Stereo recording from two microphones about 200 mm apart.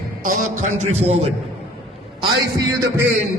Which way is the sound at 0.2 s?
40° right (ahead or behind).